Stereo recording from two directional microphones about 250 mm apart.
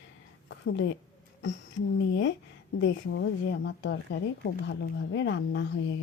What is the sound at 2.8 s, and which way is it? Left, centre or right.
Speech, left.